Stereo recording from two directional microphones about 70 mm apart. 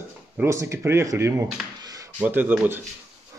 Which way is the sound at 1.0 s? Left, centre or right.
Right.